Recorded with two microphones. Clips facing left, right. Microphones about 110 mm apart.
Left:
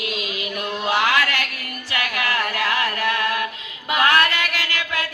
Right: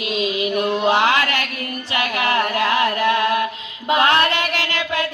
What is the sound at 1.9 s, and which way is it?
Music, 20° right (ahead or behind).